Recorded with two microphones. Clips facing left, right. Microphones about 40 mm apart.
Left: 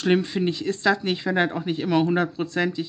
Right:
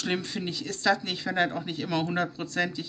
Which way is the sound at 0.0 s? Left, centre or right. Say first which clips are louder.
Left 9 dB; centre.